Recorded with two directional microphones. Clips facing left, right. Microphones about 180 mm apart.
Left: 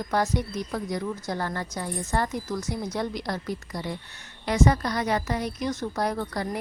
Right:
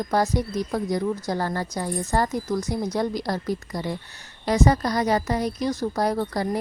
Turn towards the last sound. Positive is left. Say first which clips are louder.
# right 4 dB
turn(degrees=-35)  # may be behind; listen again after turning